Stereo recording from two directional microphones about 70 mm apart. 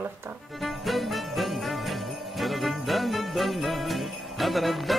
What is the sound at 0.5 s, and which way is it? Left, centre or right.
Jingle bell, centre.